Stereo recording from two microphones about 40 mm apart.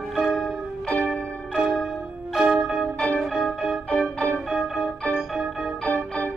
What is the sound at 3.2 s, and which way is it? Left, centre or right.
Music, centre.